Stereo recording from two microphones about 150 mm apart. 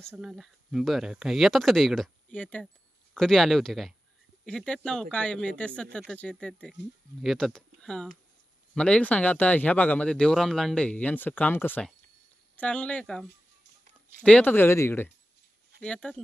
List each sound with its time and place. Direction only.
0.0 s speech: centre (ahead or behind)